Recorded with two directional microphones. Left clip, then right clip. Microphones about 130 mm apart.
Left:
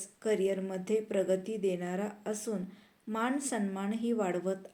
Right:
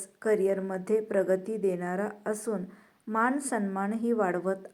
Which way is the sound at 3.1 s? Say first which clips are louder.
Right 6 dB; 20° left (ahead or behind).